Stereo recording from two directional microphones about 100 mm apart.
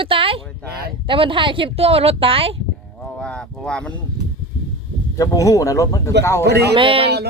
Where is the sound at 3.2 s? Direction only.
10° left (ahead or behind).